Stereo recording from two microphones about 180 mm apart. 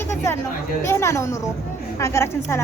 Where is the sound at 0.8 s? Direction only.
15° left (ahead or behind).